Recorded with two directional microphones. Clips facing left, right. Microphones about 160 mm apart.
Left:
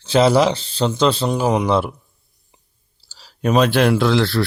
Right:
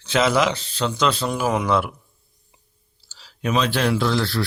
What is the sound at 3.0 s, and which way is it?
Speech, 35° left (ahead or behind).